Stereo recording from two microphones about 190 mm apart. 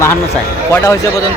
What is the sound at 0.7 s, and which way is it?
Speech, 10° left (ahead or behind).